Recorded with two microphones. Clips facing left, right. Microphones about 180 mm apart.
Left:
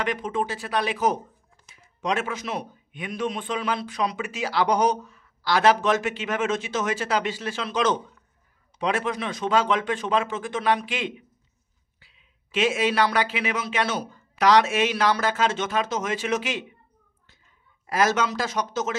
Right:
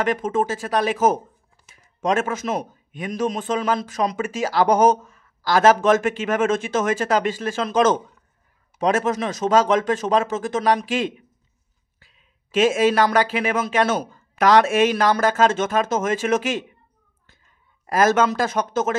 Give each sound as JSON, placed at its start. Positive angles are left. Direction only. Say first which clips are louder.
{"t": 0.0, "sound": "a man's voice", "louder": "right 5 dB", "side_deg": -45}
{"t": 17.8, "sound": "a man's voice", "louder": "right 5 dB", "side_deg": -50}